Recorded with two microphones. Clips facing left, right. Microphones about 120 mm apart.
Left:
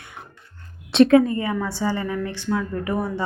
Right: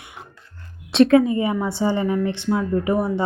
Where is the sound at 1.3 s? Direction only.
20° right (ahead or behind).